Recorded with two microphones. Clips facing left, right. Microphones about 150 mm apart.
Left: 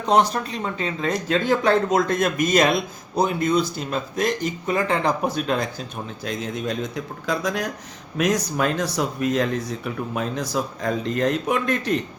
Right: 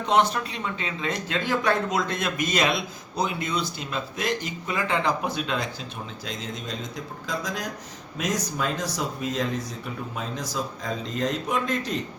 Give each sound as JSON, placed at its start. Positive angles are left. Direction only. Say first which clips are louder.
{"t": 0.0, "sound": "a man's voice", "louder": "left 3 dB", "side_deg": 40}
{"t": 6.2, "sound": "a man's voice", "louder": "left 9 dB", "side_deg": 60}